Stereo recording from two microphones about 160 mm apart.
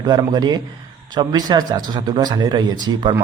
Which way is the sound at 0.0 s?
25° right (ahead or behind).